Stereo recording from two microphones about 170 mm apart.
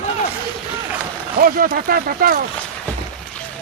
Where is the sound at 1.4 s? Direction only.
55° right (ahead or behind).